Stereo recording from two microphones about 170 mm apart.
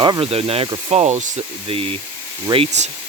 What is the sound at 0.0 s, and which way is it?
Speech, 30° right (ahead or behind).